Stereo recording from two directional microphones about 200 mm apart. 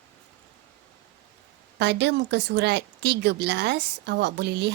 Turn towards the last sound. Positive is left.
turn(degrees=-55)  # may be behind; listen again after turning